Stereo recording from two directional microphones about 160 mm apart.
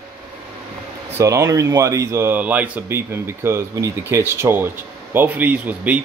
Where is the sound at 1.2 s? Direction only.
20° right (ahead or behind).